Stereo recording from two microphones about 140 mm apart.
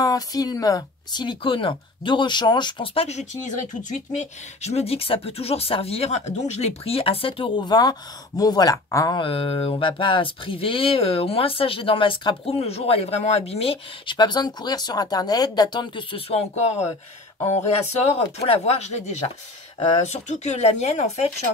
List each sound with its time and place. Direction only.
0.0 s speech: 25° left (ahead or behind)
9.2 s speech: 40° left (ahead or behind)
18.0 s speech: 50° left (ahead or behind)